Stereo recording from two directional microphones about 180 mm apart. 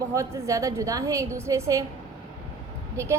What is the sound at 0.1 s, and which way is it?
A woman's voice, 15° right (ahead or behind).